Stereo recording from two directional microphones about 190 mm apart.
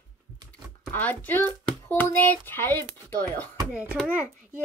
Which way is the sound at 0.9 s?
10° left (ahead or behind).